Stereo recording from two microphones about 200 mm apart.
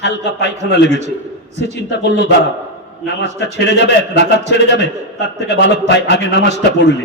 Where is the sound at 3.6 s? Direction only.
60° left (ahead or behind).